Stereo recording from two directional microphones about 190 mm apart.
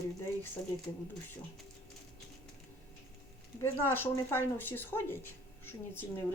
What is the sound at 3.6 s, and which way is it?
Speech, 10° left (ahead or behind).